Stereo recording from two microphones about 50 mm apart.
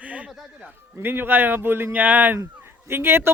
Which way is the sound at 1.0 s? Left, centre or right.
Right.